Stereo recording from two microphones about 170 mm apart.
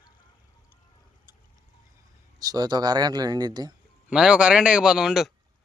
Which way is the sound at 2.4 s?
20° right (ahead or behind).